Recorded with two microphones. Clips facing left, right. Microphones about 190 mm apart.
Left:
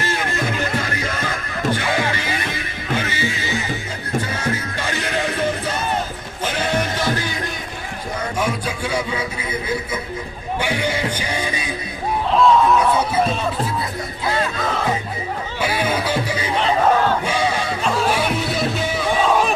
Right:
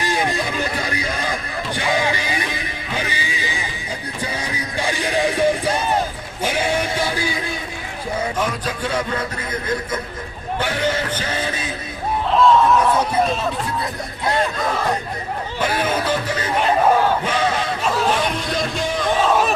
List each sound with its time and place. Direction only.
0.0 s music: 15° right (ahead or behind)
3.1 s neigh: 15° right (ahead or behind)
4.4 s music: 15° right (ahead or behind)
8.4 s a sound: 10° left (ahead or behind)
10.6 s music: 10° left (ahead or behind)
12.3 s music: centre (ahead or behind)
15.6 s music: 10° left (ahead or behind)
16.6 s crowd: 10° right (ahead or behind)
17.2 s a sound: 10° left (ahead or behind)
17.8 s music: centre (ahead or behind)